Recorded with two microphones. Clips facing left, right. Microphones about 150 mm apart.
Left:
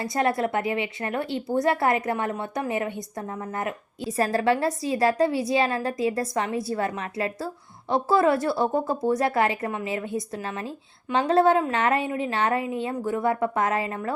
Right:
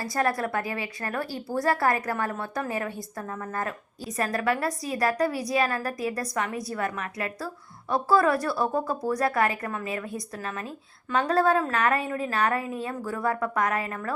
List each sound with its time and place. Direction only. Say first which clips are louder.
0.0 s a woman's voice: left 3 dB; 25° left (ahead or behind)
4.2 s a woman's voice: left 4 dB; 30° left (ahead or behind)